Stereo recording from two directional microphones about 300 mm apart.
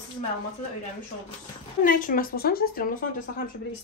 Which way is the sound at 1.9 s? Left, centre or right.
Left.